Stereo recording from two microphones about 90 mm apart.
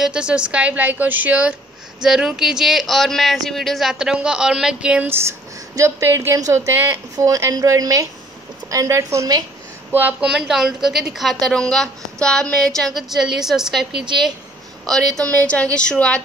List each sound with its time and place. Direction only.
0.0 s a woman's voice: 10° right (ahead or behind)
5.0 s a woman's voice: 25° right (ahead or behind)
9.9 s a woman's voice: 15° right (ahead or behind)
15.4 s a woman's voice: 15° left (ahead or behind)